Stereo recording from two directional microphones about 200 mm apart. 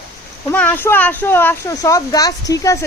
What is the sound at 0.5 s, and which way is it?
Speech, 10° left (ahead or behind).